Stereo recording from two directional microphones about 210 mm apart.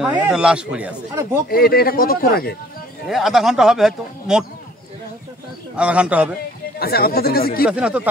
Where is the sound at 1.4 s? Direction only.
45° left (ahead or behind).